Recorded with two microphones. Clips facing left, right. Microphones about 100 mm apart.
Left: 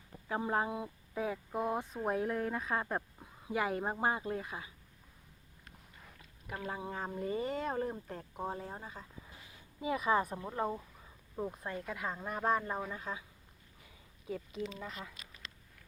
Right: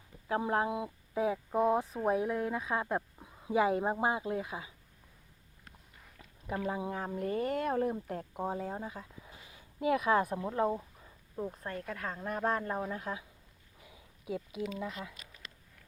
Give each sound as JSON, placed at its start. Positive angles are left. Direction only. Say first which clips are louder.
{"t": 0.3, "sound": "speech", "louder": "right 3 dB", "side_deg": -5}
{"t": 3.4, "sound": "speech", "louder": "right 6 dB", "side_deg": -20}
{"t": 6.6, "sound": "speech", "louder": "right 5 dB", "side_deg": -15}
{"t": 6.9, "sound": "speech", "louder": "right 3 dB", "side_deg": 0}
{"t": 11.5, "sound": "speech", "louder": "right 1 dB", "side_deg": 10}
{"t": 13.9, "sound": "a sound", "louder": "right 3 dB", "side_deg": -10}
{"t": 14.8, "sound": "speech", "louder": "right 5 dB", "side_deg": 0}